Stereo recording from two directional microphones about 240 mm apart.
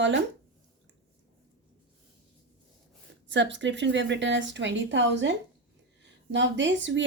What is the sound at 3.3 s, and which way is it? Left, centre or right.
A woman's voice, right.